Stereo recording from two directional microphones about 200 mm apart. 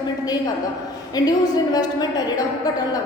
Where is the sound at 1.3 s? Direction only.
20° left (ahead or behind).